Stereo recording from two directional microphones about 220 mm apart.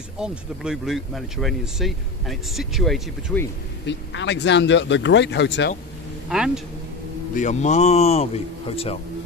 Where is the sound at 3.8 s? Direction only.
55° left (ahead or behind).